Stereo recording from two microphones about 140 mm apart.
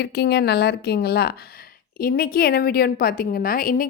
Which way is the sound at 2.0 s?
90° left.